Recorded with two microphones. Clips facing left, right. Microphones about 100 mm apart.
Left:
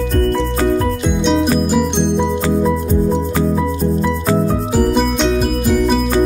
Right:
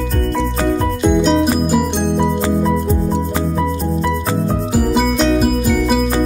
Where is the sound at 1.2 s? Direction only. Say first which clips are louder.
Even; centre (ahead or behind).